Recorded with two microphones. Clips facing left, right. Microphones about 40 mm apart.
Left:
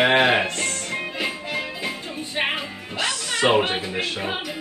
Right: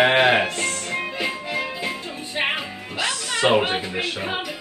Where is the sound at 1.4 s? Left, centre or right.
Centre.